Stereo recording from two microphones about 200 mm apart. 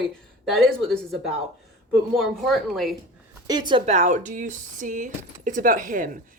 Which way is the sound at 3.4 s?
20° right (ahead or behind).